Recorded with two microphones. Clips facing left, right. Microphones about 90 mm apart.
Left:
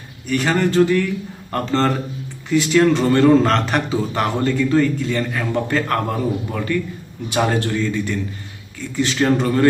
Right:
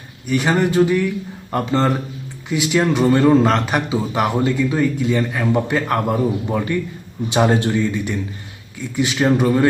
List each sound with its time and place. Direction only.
0.3 s a man's voice: 15° right (ahead or behind)